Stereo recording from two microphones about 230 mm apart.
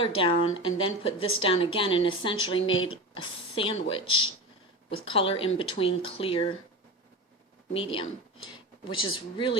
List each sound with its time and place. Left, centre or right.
0.0 s a woman's voice: left
2.6 s speech: left
3.5 s a woman's voice: left
7.7 s a woman's voice: left
8.5 s a sound: left
9.1 s a woman's voice: left